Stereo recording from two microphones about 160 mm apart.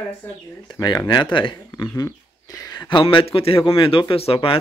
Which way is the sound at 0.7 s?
25° left (ahead or behind).